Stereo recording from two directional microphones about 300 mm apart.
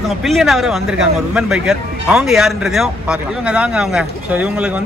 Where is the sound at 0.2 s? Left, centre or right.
Centre.